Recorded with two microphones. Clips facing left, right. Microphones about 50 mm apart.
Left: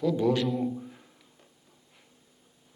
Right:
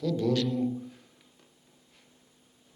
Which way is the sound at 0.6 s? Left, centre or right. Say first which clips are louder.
Right 1 dB; centre.